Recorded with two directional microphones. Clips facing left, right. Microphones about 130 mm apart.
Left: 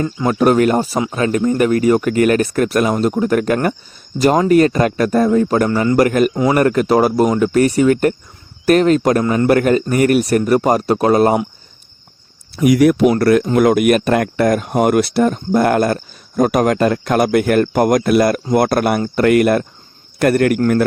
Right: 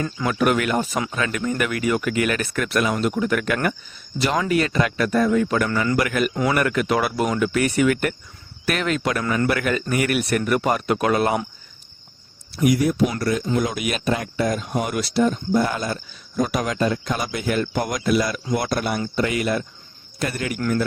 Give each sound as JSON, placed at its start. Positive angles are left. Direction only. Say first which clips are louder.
{"t": 0.3, "sound": "speech", "louder": "left 8 dB", "side_deg": 35}
{"t": 12.7, "sound": "a man's voice", "louder": "left 9 dB", "side_deg": 80}